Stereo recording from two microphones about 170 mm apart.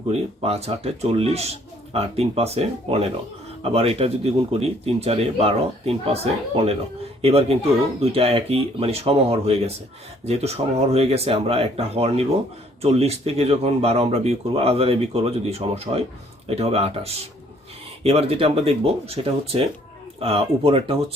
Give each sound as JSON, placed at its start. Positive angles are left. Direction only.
{"t": 0.1, "sound": "speech", "side_deg": -35}